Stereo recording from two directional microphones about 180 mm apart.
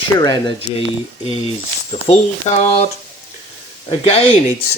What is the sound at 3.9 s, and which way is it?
Speech, 35° left (ahead or behind).